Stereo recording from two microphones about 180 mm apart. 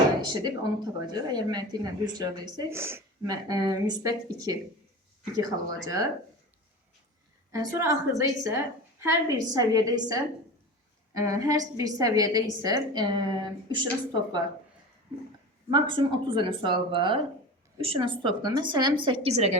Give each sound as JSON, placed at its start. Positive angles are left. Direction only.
{"t": 0.2, "sound": "speech", "side_deg": -25}
{"t": 7.5, "sound": "speech", "side_deg": -20}
{"t": 15.7, "sound": "speech", "side_deg": -25}